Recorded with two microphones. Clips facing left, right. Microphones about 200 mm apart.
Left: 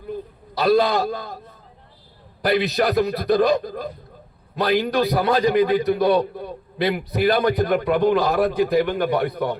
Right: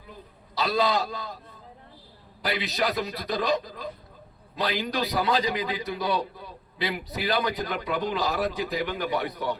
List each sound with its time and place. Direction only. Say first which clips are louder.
0.5 s a man's voice: left 7 dB; 55° left (ahead or behind)
2.4 s a man's voice: left 8 dB; 55° left (ahead or behind)